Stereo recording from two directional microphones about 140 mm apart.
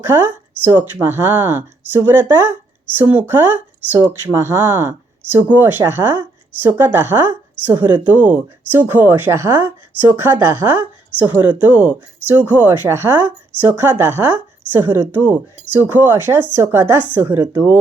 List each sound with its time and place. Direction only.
0.0 s speech: 15° right (ahead or behind)